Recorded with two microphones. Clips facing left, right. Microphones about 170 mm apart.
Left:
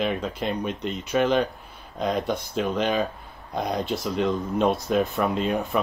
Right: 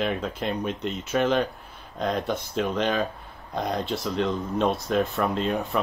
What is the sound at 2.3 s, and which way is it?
Speech, centre (ahead or behind).